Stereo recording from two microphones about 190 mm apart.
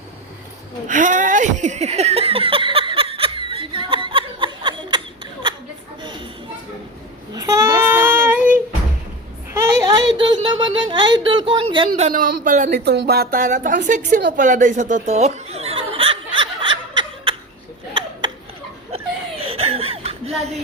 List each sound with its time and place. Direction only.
0.9 s laughter: 40° right (ahead or behind); by 5.5 s 25° right (ahead or behind)
6.0 s a sound: 25° right (ahead or behind)
7.3 s child singing: 15° right (ahead or behind)
9.5 s a sound: 20° right (ahead or behind)
11.9 s a woman's voice: 40° right (ahead or behind)
12.7 s speech: 60° right (ahead or behind); by 13.7 s 40° right (ahead or behind)
14.3 s chuckle: 40° right (ahead or behind); by 17.3 s 25° right (ahead or behind)
18.9 s chuckle: 30° right (ahead or behind)